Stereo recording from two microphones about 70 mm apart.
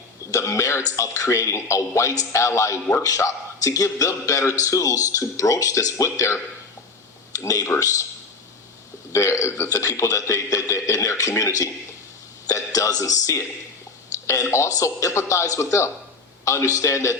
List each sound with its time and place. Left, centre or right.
0.3 s throat clearing: left
0.9 s a man's voice: left
7.4 s a man's voice: left
9.1 s a man's voice: left
9.6 s a man's voice: left
14.5 s a man's voice: left